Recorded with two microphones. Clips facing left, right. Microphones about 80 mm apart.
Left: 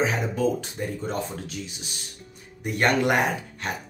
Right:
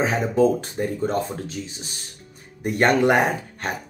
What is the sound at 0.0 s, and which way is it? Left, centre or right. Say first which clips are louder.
Speech: right 5 dB; right.